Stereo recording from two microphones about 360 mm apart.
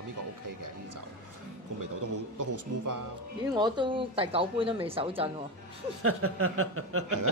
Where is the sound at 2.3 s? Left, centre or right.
Right.